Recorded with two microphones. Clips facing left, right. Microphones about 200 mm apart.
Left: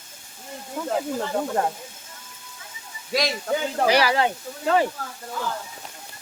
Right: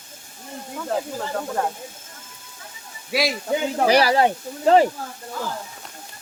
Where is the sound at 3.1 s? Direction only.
10° right (ahead or behind).